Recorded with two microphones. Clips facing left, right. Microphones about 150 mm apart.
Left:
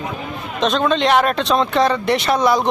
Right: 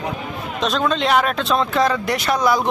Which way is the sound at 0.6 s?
Centre (ahead or behind).